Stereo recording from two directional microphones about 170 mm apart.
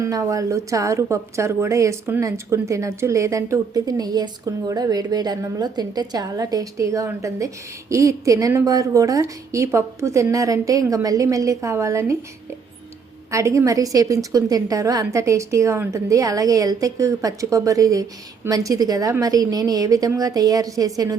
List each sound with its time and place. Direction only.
0.0 s a woman's voice: 20° right (ahead or behind)
13.3 s a woman's voice: 20° right (ahead or behind)